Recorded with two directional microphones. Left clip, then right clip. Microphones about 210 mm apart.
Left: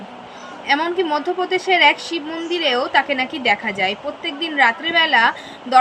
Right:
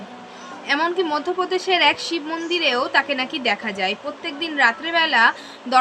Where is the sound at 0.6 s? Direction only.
15° right (ahead or behind).